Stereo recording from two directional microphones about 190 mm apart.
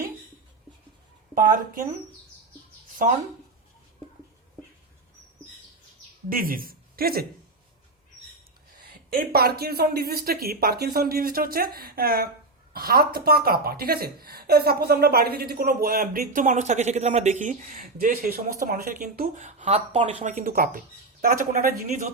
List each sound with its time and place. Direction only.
1.4 s a woman's voice: 45° right (ahead or behind)
6.2 s speech: 50° right (ahead or behind)
9.1 s a woman's voice: 55° right (ahead or behind)